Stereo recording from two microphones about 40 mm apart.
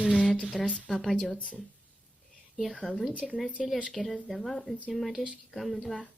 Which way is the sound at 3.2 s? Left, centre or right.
Centre.